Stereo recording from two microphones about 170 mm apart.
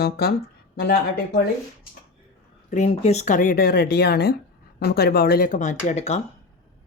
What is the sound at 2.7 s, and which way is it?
Speech, 40° left (ahead or behind).